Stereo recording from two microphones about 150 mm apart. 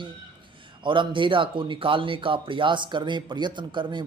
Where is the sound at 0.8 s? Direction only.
35° right (ahead or behind).